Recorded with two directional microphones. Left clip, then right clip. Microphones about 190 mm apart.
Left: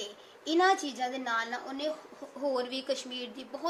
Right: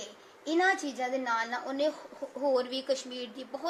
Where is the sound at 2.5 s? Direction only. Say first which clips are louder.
Right 3 dB; centre (ahead or behind).